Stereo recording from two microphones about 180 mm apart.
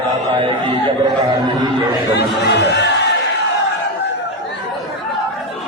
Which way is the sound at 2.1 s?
70° left (ahead or behind).